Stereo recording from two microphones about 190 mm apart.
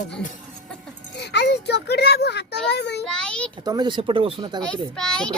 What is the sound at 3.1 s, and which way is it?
Speech, 5° left (ahead or behind).